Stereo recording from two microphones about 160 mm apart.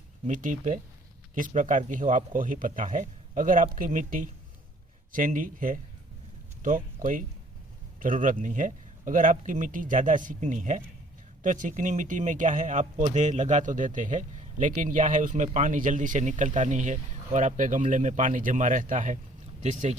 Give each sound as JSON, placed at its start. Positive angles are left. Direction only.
{"t": 0.3, "sound": "speech", "side_deg": -55}